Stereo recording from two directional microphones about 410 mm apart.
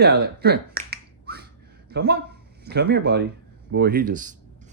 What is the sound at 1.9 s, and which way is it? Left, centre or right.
Speech, right.